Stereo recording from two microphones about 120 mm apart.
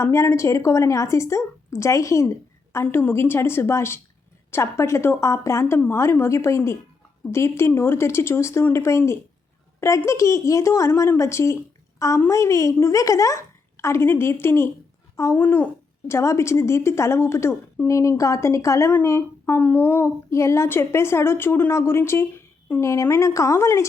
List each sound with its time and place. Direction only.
0.0 s a woman's voice: 25° left (ahead or behind)